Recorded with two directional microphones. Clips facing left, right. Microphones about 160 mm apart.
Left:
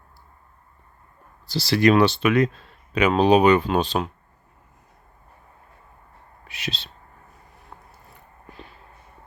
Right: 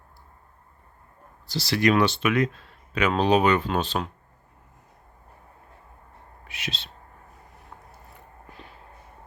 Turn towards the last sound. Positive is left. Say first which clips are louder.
# left 1 dB
turn(degrees=35)  # may be behind; listen again after turning